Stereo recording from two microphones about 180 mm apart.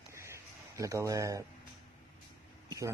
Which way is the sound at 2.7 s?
15° right (ahead or behind).